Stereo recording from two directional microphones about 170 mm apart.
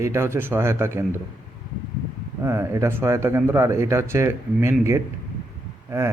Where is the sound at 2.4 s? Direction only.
15° right (ahead or behind).